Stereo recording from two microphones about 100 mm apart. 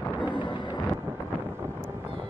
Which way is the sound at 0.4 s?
50° left (ahead or behind).